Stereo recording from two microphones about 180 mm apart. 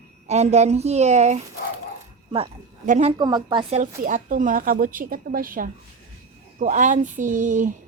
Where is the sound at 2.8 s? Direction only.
40° right (ahead or behind).